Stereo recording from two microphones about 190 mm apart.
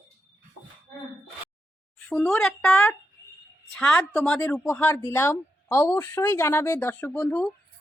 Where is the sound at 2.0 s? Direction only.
5° left (ahead or behind).